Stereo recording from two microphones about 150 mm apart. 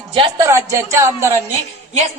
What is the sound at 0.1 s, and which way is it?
Speech, 35° right (ahead or behind).